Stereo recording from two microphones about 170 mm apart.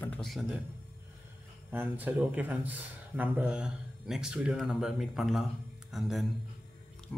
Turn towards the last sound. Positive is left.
turn(degrees=0)  # may be behind; listen again after turning